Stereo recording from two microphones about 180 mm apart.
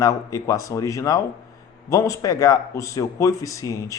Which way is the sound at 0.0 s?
20° left (ahead or behind).